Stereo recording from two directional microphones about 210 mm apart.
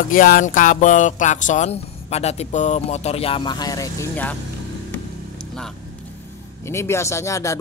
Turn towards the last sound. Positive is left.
turn(degrees=15)  # may be behind; listen again after turning